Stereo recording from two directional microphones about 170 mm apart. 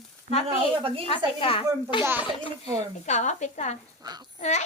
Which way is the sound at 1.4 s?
30° left (ahead or behind).